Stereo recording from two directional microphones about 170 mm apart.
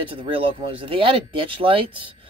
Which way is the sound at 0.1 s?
35° right (ahead or behind).